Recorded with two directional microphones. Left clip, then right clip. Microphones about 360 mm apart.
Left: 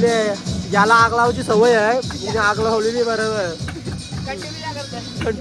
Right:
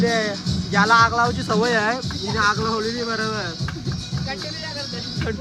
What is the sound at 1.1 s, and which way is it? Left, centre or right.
Music, left.